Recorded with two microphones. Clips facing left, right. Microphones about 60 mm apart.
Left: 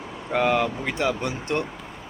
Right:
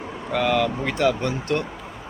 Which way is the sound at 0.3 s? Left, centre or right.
Left.